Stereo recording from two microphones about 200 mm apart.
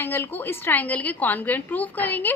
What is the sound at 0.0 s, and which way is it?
A woman's voice, 10° left (ahead or behind).